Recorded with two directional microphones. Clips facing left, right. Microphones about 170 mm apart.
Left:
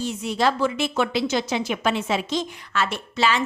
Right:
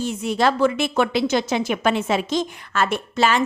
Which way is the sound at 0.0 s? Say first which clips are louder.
Right 2 dB; 50° right (ahead or behind).